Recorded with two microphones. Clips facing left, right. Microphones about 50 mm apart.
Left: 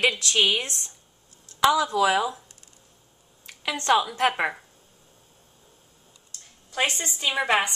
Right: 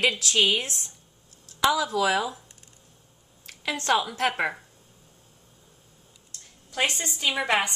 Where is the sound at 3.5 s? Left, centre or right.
Centre.